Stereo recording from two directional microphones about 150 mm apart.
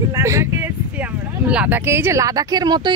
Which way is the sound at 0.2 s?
20° right (ahead or behind).